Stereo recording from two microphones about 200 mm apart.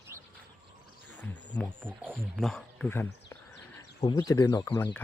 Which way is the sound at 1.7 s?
10° right (ahead or behind).